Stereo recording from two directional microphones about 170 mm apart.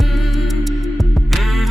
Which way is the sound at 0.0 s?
Centre (ahead or behind).